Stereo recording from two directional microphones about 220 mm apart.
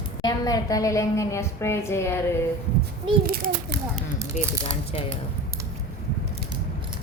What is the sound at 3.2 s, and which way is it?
Speech, 40° right (ahead or behind).